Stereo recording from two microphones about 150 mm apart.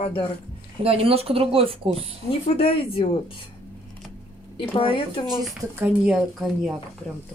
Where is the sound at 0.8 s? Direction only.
40° right (ahead or behind).